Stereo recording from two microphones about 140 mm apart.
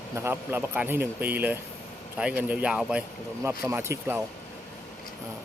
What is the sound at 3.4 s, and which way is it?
Speech, 20° right (ahead or behind).